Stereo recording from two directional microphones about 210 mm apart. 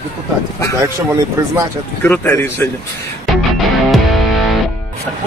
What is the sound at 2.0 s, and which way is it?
Speech, 10° left (ahead or behind).